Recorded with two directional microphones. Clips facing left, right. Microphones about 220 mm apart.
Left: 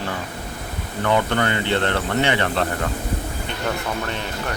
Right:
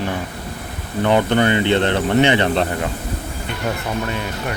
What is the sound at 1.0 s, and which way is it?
Speech, 20° right (ahead or behind).